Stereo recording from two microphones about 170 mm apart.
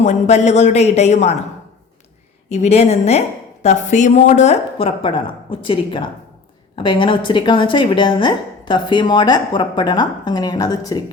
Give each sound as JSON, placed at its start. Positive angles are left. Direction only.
{"t": 0.0, "sound": "a woman's voice", "side_deg": 45}
{"t": 2.5, "sound": "a woman's voice", "side_deg": 40}